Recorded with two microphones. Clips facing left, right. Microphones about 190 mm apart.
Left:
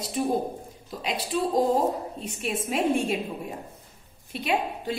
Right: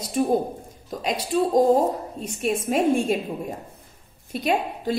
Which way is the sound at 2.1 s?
45° right (ahead or behind).